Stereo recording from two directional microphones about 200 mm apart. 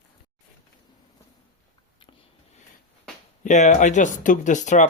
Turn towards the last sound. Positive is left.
turn(degrees=35)  # may be behind; listen again after turning